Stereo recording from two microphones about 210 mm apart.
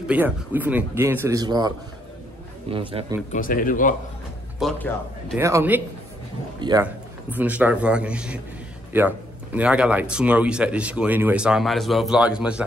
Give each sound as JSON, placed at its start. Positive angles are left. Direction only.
{"t": 0.0, "sound": "a man's voice", "side_deg": -10}
{"t": 2.7, "sound": "a man's voice", "side_deg": -25}
{"t": 3.3, "sound": "a man's voice", "side_deg": 40}
{"t": 4.6, "sound": "speech", "side_deg": 5}
{"t": 5.4, "sound": "a man's voice", "side_deg": -10}
{"t": 6.8, "sound": "a man's voice", "side_deg": -5}